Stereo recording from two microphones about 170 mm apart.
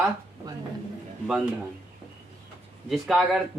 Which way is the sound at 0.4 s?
25° right (ahead or behind).